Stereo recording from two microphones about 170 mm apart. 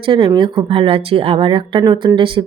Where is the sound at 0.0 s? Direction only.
30° right (ahead or behind).